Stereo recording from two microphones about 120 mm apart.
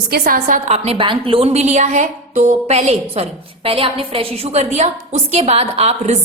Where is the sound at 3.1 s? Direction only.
50° right (ahead or behind).